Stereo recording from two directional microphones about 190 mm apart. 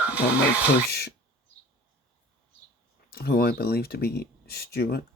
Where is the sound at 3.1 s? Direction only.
55° left (ahead or behind).